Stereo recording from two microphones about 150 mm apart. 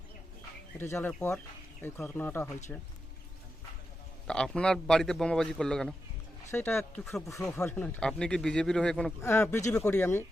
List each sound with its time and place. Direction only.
0.8 s speech: 15° left (ahead or behind)
4.3 s a man's voice: 5° left (ahead or behind)
6.5 s speech: 15° left (ahead or behind)
6.9 s a man's voice: 5° left (ahead or behind)
7.3 s speech: 20° left (ahead or behind)
7.6 s a man's voice: 10° left (ahead or behind)
9.2 s speech: 15° left (ahead or behind)